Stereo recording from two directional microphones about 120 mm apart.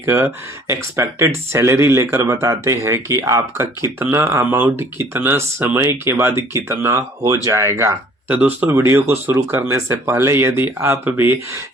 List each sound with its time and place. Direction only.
0.0 s speech: 20° right (ahead or behind)